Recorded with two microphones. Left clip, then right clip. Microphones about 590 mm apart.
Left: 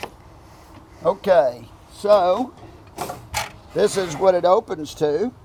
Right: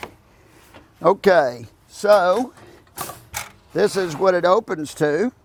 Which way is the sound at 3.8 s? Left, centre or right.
Right.